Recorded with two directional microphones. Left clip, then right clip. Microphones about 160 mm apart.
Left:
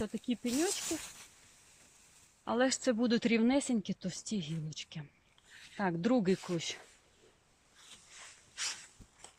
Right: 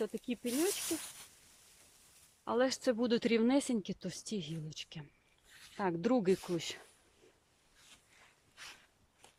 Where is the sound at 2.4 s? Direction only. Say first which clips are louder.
Left 1 dB; 20° right (ahead or behind).